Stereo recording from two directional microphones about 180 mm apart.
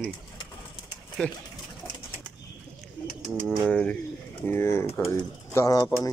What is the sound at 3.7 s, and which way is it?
Speech, 5° left (ahead or behind).